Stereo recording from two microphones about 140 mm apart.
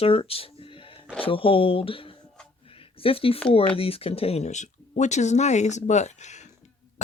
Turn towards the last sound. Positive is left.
turn(degrees=55)  # may be behind; listen again after turning